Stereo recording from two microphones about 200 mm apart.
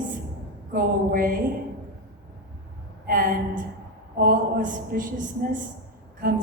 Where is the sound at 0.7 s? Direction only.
45° right (ahead or behind).